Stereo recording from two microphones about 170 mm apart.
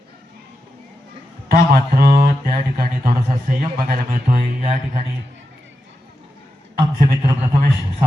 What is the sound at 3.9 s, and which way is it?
Speech, 60° right (ahead or behind).